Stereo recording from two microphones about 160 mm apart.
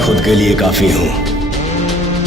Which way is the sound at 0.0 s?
Centre (ahead or behind).